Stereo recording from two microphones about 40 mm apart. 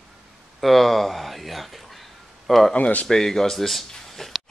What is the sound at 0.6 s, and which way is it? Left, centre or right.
Speech, centre.